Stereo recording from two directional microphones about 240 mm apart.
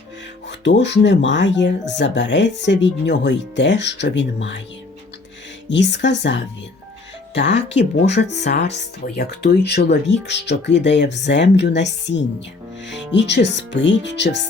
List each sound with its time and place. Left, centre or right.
0.4 s speech: left
5.6 s speech: left
7.7 s speech: left
9.1 s speech: left